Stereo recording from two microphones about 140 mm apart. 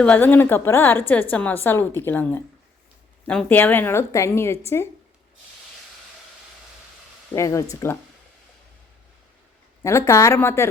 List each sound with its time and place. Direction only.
0.0 s a woman's voice: 10° left (ahead or behind)
7.3 s speech: 20° left (ahead or behind)
9.8 s speech: 20° left (ahead or behind)